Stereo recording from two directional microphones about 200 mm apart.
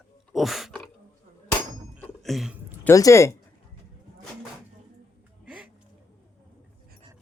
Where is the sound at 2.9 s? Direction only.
15° left (ahead or behind).